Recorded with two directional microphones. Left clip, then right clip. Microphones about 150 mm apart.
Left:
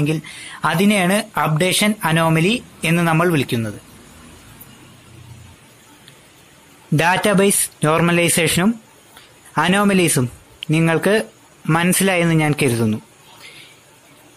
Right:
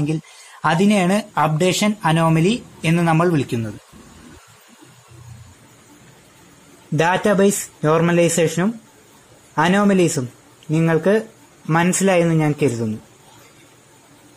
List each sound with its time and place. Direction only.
0.0 s speech: 5° left (ahead or behind)
7.0 s speech: 25° left (ahead or behind)